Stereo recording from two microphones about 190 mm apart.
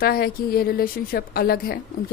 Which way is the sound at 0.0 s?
50° left (ahead or behind).